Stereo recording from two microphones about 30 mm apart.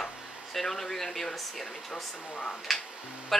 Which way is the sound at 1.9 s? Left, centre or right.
Left.